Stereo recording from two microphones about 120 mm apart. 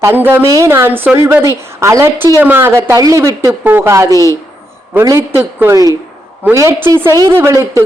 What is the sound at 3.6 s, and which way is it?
A woman's voice, 15° right (ahead or behind).